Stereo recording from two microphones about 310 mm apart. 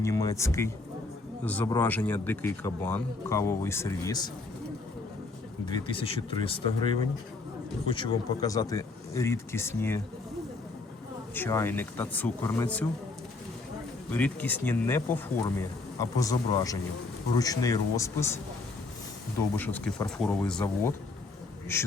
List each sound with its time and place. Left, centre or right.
0.0 s speech: centre
5.6 s speech: centre
11.3 s speech: centre
14.1 s speech: centre
19.5 s speech: centre